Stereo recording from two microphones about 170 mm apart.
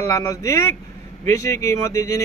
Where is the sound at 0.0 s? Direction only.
15° left (ahead or behind).